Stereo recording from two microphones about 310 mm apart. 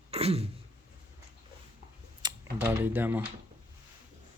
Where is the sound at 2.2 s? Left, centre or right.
Centre.